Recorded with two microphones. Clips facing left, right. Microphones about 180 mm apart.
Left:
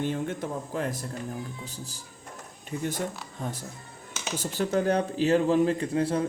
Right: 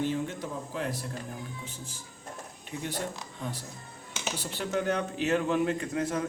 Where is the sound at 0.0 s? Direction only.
55° left (ahead or behind); by 2.0 s 35° left (ahead or behind).